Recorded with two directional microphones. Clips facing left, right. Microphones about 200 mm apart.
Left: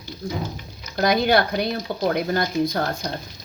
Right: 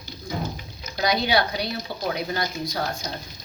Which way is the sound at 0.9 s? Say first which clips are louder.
Left 4 dB; 55° left (ahead or behind).